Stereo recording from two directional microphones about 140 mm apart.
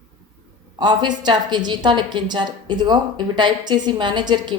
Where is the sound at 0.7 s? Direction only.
35° right (ahead or behind).